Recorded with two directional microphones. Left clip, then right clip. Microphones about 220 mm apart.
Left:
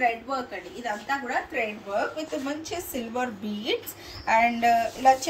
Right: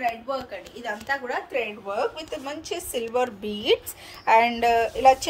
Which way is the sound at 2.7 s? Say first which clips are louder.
Right 4 dB; 25° right (ahead or behind).